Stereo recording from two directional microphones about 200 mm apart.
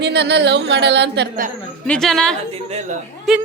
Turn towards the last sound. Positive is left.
turn(degrees=0)  # may be behind; listen again after turning